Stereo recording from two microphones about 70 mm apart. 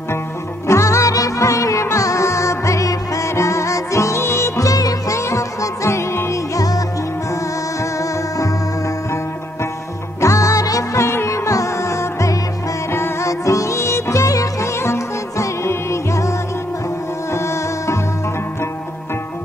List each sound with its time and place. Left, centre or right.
0.7 s music: left
4.6 s music: left
7.8 s music: left
13.3 s music: left